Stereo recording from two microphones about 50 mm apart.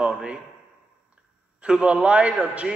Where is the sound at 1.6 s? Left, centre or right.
Centre.